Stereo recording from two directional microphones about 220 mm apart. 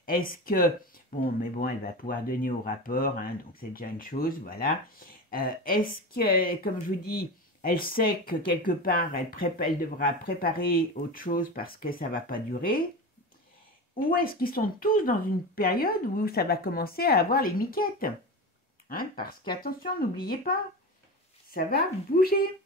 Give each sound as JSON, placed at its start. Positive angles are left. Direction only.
{"t": 0.0, "sound": "speech", "side_deg": 40}
{"t": 14.1, "sound": "speech", "side_deg": 40}